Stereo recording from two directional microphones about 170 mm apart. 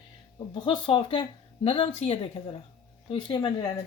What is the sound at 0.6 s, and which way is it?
Speech, 30° left (ahead or behind).